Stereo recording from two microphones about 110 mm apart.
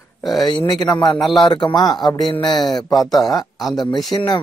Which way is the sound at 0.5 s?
45° left (ahead or behind).